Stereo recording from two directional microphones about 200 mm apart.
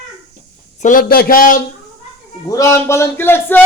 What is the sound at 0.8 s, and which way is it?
Speech, 40° left (ahead or behind).